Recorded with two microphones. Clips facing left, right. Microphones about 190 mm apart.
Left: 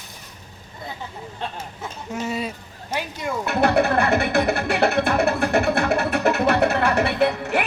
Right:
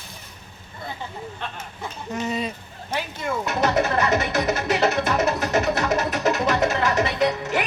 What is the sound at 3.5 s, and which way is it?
Music, 60° left (ahead or behind).